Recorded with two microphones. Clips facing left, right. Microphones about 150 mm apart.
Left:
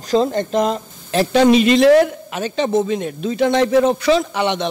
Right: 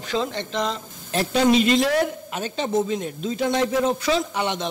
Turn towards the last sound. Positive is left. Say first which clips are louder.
# left 6 dB
turn(degrees=80)